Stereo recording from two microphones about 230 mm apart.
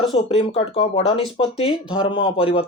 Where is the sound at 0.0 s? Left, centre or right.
Left.